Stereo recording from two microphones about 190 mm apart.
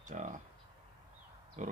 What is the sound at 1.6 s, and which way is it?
Speech, 40° right (ahead or behind).